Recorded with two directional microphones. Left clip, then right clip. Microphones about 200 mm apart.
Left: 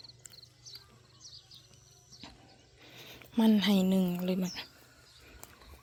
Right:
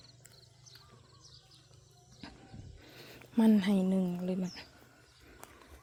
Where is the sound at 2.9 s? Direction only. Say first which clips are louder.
Left 2 dB; 15° right (ahead or behind); by 4.7 s centre (ahead or behind).